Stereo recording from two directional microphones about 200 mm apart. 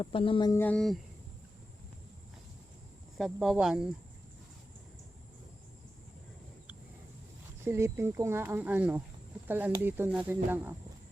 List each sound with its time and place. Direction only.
0.0 s speech: 25° left (ahead or behind)
0.6 s speech: 5° left (ahead or behind)
3.2 s speech: centre (ahead or behind)
7.6 s speech: 10° right (ahead or behind)